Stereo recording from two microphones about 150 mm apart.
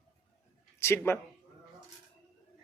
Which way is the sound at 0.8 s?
15° left (ahead or behind).